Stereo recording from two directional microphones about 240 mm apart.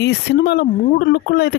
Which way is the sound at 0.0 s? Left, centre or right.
Left.